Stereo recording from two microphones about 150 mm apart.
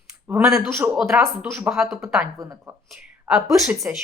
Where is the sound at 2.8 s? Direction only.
Centre (ahead or behind).